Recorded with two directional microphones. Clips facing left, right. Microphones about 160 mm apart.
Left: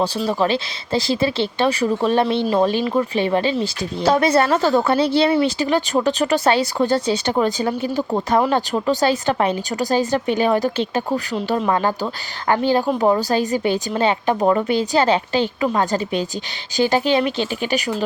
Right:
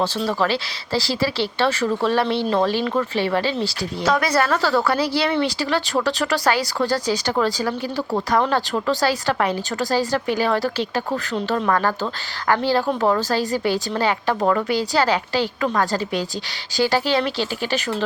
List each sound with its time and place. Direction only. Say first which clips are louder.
0.3 s a woman's voice: left 2 dB; 20° left (ahead or behind)